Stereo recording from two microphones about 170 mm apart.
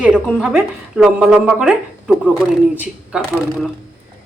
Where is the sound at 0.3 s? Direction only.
5° right (ahead or behind).